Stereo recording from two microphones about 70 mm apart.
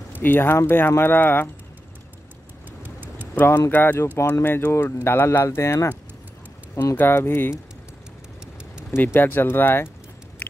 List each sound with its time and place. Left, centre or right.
0.2 s speech: left
2.8 s a sound: right
3.3 s speech: left
7.0 s speech: left
8.9 s speech: left